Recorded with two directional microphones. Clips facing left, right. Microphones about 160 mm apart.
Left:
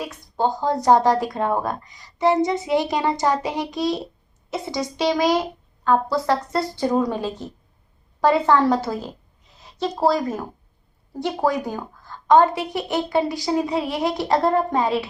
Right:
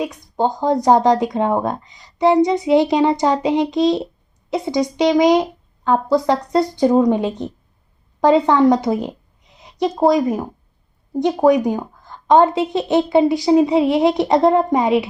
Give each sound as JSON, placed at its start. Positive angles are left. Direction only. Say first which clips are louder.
{"t": 0.0, "sound": "a woman's voice", "louder": "right 4 dB", "side_deg": -20}